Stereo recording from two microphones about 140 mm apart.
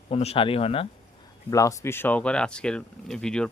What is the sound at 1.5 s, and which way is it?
Speech, 25° left (ahead or behind).